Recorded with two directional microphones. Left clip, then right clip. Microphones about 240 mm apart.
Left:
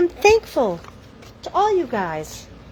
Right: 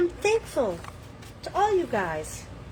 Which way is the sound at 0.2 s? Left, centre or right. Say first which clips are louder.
Left 9 dB; left.